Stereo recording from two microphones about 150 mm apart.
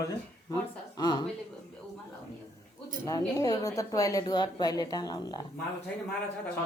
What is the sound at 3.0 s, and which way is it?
A woman's voice, 20° left (ahead or behind).